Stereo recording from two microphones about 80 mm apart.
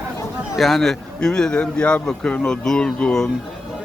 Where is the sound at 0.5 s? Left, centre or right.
Centre.